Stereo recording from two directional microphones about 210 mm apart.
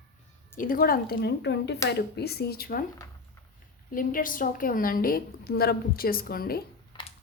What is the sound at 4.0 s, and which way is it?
A woman's voice, 40° left (ahead or behind).